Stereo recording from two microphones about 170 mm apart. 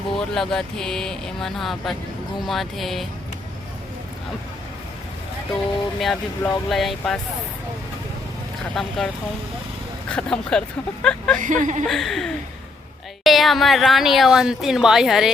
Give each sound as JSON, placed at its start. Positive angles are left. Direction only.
{"t": 0.1, "sound": "speech", "side_deg": 5}
{"t": 6.0, "sound": "speech", "side_deg": 0}
{"t": 8.7, "sound": "speech", "side_deg": 0}
{"t": 10.1, "sound": "speech", "side_deg": 5}
{"t": 11.3, "sound": "speech", "side_deg": -50}
{"t": 11.9, "sound": "speech", "side_deg": 0}